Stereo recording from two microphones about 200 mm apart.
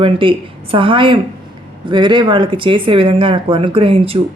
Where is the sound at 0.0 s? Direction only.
25° right (ahead or behind).